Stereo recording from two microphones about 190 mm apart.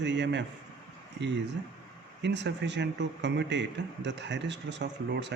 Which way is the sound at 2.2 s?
65° right (ahead or behind).